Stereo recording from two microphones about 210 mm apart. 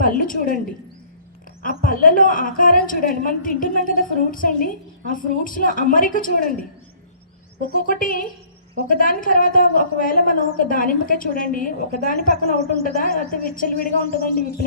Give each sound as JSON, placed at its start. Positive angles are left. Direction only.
{"t": 0.0, "sound": "a sound", "side_deg": 40}
{"t": 1.8, "sound": "a woman's voice", "side_deg": 40}
{"t": 7.7, "sound": "a woman's voice", "side_deg": 40}